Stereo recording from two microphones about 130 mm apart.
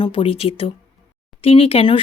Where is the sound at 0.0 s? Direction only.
40° left (ahead or behind).